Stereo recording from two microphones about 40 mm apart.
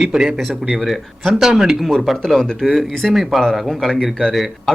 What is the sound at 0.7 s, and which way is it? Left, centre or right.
Speech, centre.